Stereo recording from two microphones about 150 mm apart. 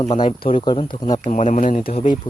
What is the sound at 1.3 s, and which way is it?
Speech, 55° left (ahead or behind).